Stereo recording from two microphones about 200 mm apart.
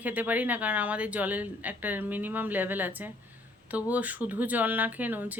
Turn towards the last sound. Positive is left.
turn(degrees=-10)  # may be behind; listen again after turning